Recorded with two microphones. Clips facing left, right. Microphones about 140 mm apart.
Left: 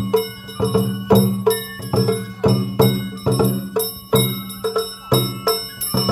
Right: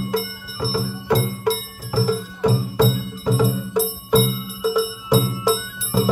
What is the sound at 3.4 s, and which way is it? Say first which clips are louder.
Music: even; centre (ahead or behind).